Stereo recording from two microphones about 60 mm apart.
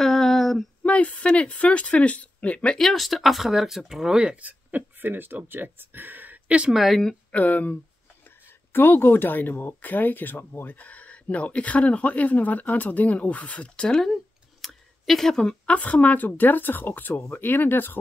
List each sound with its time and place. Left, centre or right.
0.0 s female singing: centre
0.8 s speech: left
2.8 s speech: centre
4.4 s speech: right
6.7 s speech: centre
7.3 s speech: left
8.7 s speech: left; by 15.5 s centre
15.6 s speech: left